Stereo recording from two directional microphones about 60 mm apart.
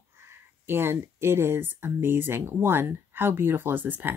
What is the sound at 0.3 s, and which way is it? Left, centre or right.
Speech, right.